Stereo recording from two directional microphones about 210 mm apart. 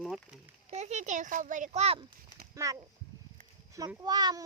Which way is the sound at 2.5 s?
15° right (ahead or behind).